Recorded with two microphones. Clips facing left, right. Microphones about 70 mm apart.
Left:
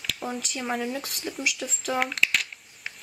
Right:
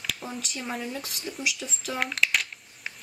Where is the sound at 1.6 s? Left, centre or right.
Centre.